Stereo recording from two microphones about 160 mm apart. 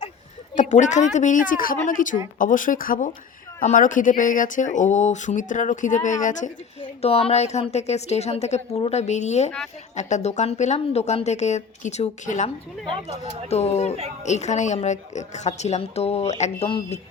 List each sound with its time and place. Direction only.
0.5 s a woman's voice: 50° left (ahead or behind)
7.0 s speech: 40° left (ahead or behind)
13.5 s speech: 40° left (ahead or behind)
16.6 s speech: 30° left (ahead or behind)